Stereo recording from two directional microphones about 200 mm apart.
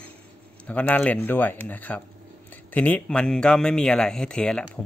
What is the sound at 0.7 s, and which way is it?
Speech, 5° left (ahead or behind).